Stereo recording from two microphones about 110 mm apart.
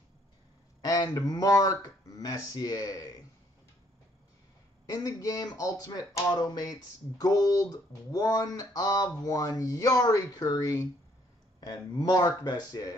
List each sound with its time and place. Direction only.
0.8 s speech: 35° left (ahead or behind)
4.8 s speech: 30° left (ahead or behind)